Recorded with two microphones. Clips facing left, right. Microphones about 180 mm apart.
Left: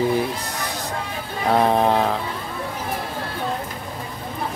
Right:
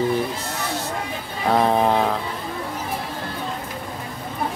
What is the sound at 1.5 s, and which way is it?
Speech, centre (ahead or behind).